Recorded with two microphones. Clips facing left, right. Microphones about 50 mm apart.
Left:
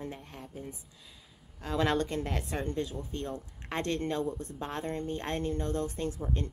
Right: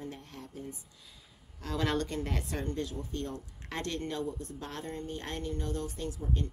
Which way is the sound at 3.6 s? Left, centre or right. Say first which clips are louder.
Left 4 dB; left.